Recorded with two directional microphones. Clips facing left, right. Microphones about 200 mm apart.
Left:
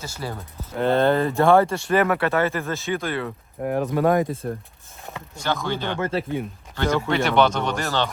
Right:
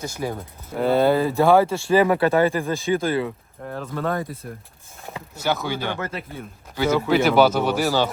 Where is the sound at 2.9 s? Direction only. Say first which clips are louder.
Right 5 dB; 25° right (ahead or behind).